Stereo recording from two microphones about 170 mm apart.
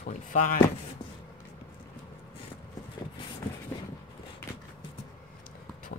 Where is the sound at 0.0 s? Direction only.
50° left (ahead or behind).